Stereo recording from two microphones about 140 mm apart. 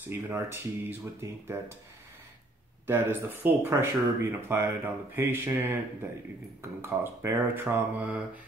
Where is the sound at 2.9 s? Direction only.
15° right (ahead or behind).